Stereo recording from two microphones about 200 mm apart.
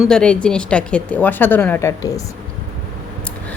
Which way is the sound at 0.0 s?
5° left (ahead or behind).